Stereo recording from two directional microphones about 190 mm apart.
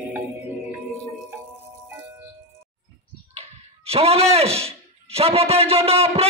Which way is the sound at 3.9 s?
30° right (ahead or behind).